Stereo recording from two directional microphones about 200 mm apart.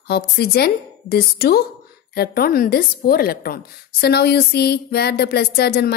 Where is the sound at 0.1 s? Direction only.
50° left (ahead or behind).